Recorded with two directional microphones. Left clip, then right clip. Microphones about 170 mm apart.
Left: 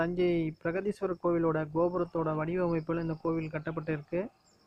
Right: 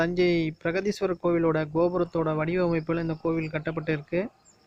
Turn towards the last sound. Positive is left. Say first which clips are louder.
# right 6 dB
turn(degrees=-10)  # may be behind; listen again after turning